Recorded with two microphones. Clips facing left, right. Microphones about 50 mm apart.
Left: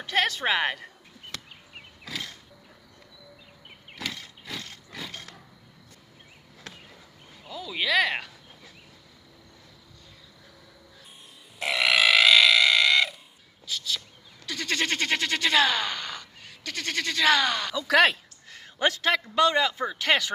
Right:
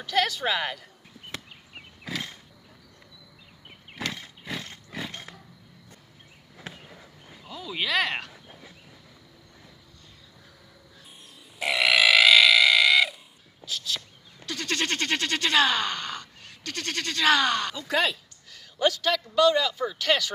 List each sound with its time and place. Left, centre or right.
0.0 s a woman's voice: left
2.0 s wild animals: centre
4.1 s a sound: centre
6.6 s a sound: centre
8.3 s a sound: centre
11.6 s burping: centre
13.7 s speech: centre
17.8 s speech: left
18.5 s a man's voice: left